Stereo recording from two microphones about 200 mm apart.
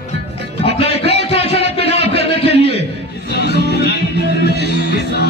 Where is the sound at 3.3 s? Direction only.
55° left (ahead or behind).